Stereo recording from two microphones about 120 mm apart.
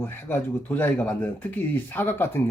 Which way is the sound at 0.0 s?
20° left (ahead or behind).